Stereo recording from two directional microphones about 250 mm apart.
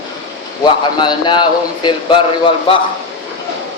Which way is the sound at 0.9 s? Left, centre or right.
Centre.